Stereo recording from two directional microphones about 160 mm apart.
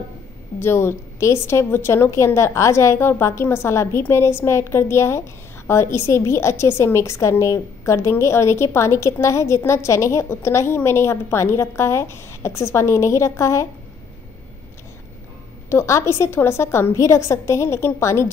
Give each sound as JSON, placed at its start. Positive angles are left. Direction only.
{"t": 0.6, "sound": "a woman's voice", "side_deg": 15}
{"t": 15.7, "sound": "a woman's voice", "side_deg": 15}